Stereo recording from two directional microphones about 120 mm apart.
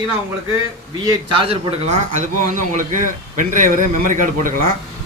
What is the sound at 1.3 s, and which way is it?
Speech, 55° right (ahead or behind).